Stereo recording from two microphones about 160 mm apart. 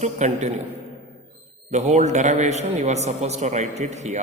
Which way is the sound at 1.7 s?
45° right (ahead or behind).